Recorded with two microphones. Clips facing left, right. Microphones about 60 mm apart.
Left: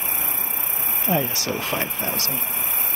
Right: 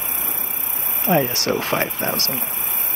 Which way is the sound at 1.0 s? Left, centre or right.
Right.